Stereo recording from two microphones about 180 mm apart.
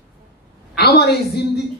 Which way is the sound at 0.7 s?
60° left (ahead or behind).